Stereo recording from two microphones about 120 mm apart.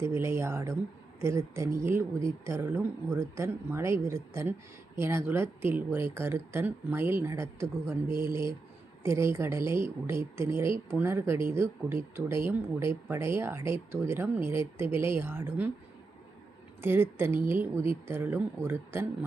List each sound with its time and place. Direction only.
0.0 s speech: 25° right (ahead or behind)
16.8 s speech: 20° right (ahead or behind)